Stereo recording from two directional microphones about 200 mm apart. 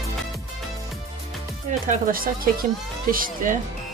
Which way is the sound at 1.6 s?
40° right (ahead or behind).